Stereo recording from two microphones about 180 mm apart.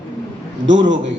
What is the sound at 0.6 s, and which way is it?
Speech, 90° right.